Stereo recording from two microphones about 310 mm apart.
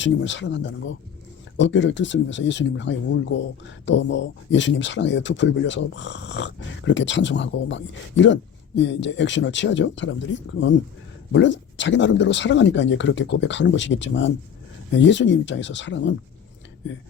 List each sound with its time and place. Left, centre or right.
0.0 s speech: left
11.3 s speech: left